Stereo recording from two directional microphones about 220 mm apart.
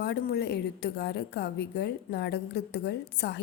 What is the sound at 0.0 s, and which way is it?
A woman's voice, 50° left (ahead or behind).